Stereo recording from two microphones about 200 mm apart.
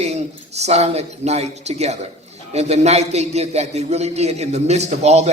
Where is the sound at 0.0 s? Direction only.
35° right (ahead or behind).